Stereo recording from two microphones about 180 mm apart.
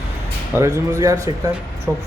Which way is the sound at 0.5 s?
15° right (ahead or behind).